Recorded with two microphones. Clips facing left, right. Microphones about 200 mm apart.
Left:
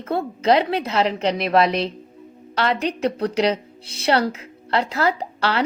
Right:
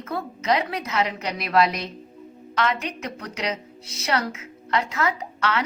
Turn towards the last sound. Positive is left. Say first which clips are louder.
# left 3 dB
turn(degrees=35)  # may be behind; listen again after turning